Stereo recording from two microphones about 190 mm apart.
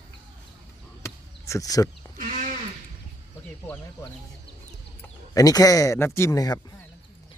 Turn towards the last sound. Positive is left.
turn(degrees=20)  # may be behind; listen again after turning